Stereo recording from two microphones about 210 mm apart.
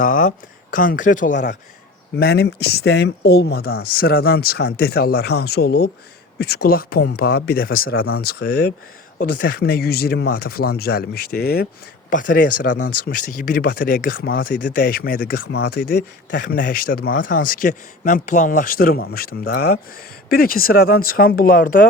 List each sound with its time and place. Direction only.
0.0 s speech: 40° left (ahead or behind)
2.1 s speech: 50° left (ahead or behind)